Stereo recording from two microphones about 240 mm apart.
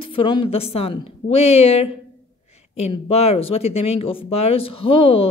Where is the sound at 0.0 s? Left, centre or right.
Left.